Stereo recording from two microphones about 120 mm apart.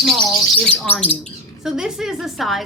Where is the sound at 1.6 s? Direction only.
5° right (ahead or behind).